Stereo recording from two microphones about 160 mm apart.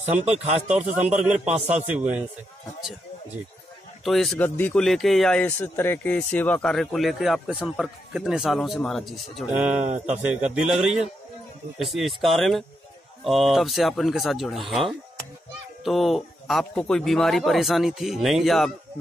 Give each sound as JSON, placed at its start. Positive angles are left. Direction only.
{"t": 0.0, "sound": "speech", "side_deg": -45}
{"t": 0.7, "sound": "a man's voice", "side_deg": -5}
{"t": 4.0, "sound": "speech", "side_deg": 0}
{"t": 9.8, "sound": "speech", "side_deg": -45}
{"t": 10.3, "sound": "speech", "side_deg": -5}